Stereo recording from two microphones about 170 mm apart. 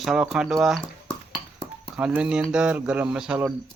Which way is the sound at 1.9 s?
5° right (ahead or behind).